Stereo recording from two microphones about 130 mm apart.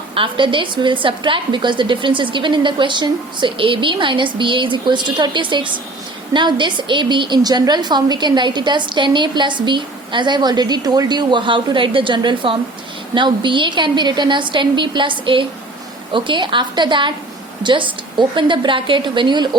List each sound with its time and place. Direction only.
0.1 s a woman's voice: 40° right (ahead or behind)